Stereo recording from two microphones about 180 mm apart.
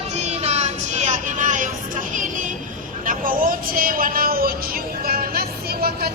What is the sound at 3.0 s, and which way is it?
Vehicle, 50° right (ahead or behind).